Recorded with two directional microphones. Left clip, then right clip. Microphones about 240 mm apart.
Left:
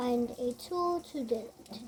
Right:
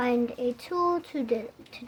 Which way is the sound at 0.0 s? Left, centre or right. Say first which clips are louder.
Right 5 dB; centre.